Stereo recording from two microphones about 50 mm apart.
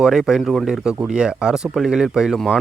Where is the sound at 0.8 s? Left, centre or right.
Centre.